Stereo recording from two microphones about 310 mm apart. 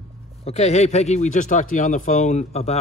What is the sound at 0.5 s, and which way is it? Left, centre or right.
Speech, left.